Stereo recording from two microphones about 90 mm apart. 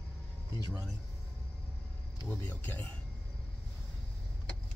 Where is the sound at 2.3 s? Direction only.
20° left (ahead or behind).